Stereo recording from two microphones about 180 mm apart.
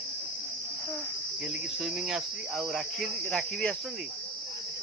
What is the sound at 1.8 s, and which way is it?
Cricket, centre (ahead or behind).